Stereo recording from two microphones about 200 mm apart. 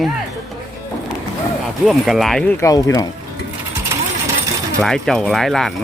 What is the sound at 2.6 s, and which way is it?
Speech, 15° left (ahead or behind).